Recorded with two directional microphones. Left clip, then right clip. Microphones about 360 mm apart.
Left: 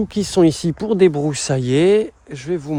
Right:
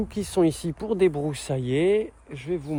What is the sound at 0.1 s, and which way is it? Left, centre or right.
Speech, left.